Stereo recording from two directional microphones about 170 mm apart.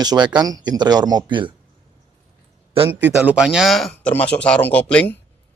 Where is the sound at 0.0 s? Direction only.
25° right (ahead or behind).